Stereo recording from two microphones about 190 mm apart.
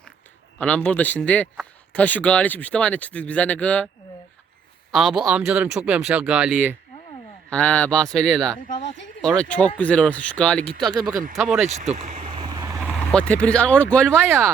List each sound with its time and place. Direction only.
0.6 s a man's voice: 5° left (ahead or behind)
4.9 s speech: centre (ahead or behind)
7.5 s speech: 5° left (ahead or behind)
8.6 s a sound: 40° left (ahead or behind)
9.2 s speech: 5° left (ahead or behind)
11.1 s speech: 45° right (ahead or behind)
11.3 s speech: centre (ahead or behind)
11.9 s boat: 35° right (ahead or behind); by 12.8 s 20° right (ahead or behind)
13.0 s a man's voice: 5° left (ahead or behind)
14.3 s speech: 15° right (ahead or behind)